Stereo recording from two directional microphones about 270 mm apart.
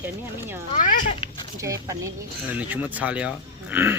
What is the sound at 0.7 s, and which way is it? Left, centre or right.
Speech, left.